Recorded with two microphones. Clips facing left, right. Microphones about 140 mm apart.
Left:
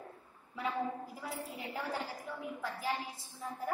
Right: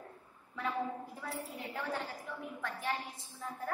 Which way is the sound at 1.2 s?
10° left (ahead or behind).